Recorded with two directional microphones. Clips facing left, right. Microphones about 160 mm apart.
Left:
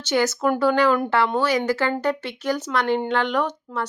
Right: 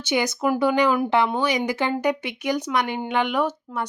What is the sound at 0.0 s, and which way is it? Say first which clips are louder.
Speech: left 2 dB; 15° right (ahead or behind).